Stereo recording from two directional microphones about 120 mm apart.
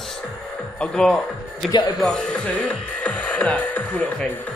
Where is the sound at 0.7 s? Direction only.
5° left (ahead or behind).